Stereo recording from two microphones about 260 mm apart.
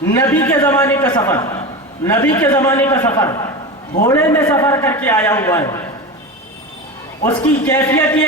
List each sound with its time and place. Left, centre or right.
0.2 s a man's voice: centre
7.3 s a man's voice: centre